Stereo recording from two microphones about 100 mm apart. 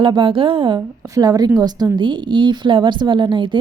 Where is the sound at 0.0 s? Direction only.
55° right (ahead or behind).